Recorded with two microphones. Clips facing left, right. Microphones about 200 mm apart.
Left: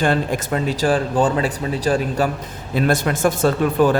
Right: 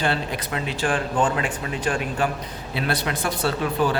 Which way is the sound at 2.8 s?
45° left (ahead or behind).